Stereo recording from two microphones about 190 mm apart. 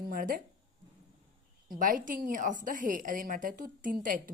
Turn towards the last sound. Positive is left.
turn(degrees=-45)  # may be behind; listen again after turning